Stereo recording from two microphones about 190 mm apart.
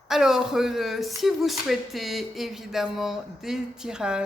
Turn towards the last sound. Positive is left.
turn(degrees=-5)  # may be behind; listen again after turning